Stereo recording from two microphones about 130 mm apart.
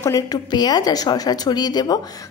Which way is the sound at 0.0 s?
30° left (ahead or behind).